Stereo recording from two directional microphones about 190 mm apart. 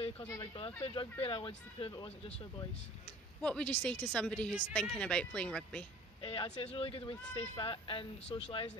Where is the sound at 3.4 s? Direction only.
5° left (ahead or behind).